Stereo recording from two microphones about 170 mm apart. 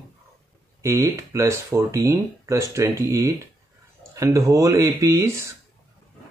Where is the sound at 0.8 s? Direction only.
15° right (ahead or behind).